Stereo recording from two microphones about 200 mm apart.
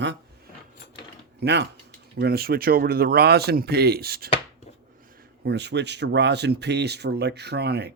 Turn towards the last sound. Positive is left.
turn(degrees=-55)  # may be behind; listen again after turning